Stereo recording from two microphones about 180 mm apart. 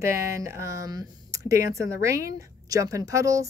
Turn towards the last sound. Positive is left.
turn(degrees=-20)  # may be behind; listen again after turning